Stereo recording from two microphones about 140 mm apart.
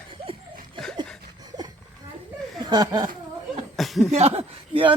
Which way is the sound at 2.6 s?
30° right (ahead or behind).